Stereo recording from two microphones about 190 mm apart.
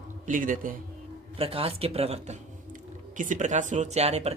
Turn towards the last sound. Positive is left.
turn(degrees=-35)  # may be behind; listen again after turning